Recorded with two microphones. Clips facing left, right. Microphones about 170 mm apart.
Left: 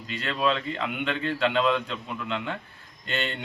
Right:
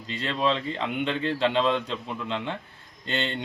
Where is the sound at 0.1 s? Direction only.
25° right (ahead or behind).